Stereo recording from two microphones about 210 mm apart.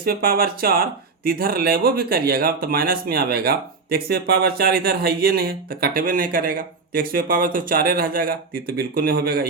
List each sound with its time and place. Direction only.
0.0 s speech: 45° right (ahead or behind)